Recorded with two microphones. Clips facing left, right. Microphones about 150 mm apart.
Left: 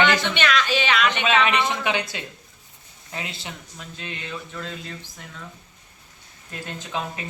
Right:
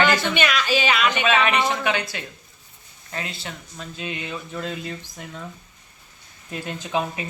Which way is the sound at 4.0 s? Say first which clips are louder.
Right 3 dB; 15° right (ahead or behind).